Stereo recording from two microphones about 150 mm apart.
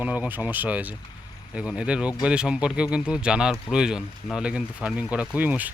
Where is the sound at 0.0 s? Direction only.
10° right (ahead or behind).